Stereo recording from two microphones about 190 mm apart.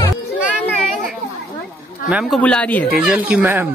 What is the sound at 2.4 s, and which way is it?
Speech, 5° left (ahead or behind).